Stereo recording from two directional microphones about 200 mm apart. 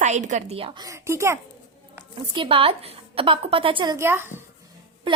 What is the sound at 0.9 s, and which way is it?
Speech, 15° right (ahead or behind).